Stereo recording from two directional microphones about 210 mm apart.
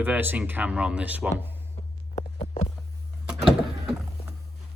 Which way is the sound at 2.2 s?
30° left (ahead or behind).